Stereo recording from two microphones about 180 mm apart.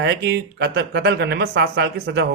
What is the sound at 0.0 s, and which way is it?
Speech, 65° right (ahead or behind).